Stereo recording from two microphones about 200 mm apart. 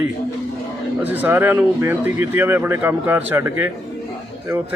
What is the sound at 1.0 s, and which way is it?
Speech, 10° right (ahead or behind).